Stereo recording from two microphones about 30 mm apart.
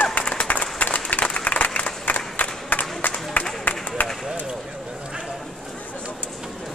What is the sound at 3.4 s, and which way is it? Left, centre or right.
Music, left.